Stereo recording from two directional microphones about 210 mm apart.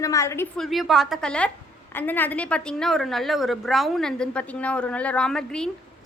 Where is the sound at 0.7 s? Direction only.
Centre (ahead or behind).